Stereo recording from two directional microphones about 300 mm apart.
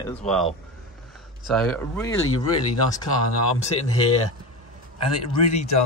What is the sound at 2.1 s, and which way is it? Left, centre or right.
Speech, left.